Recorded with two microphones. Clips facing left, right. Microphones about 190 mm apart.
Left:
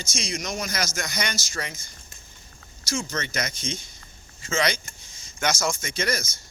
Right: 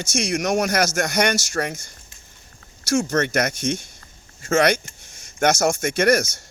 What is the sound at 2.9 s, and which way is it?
A man's voice, 65° right (ahead or behind).